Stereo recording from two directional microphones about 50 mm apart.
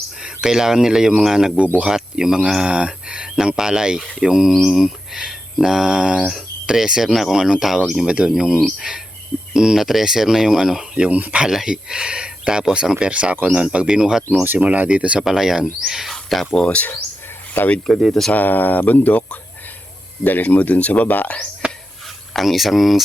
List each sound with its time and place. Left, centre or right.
0.2 s speech: centre
8.0 s speech: centre
11.1 s speech: right
11.4 s speech: centre
14.0 s speech: centre
14.4 s speech: right
15.2 s speech: centre
16.6 s speech: left
17.8 s speech: centre
18.3 s speech: left
21.6 s a sound: right
22.3 s speech: centre